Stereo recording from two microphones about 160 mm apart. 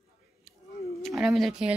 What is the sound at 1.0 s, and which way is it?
Speech, centre (ahead or behind).